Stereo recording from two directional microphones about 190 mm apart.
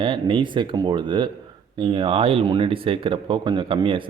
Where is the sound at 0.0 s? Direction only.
25° right (ahead or behind).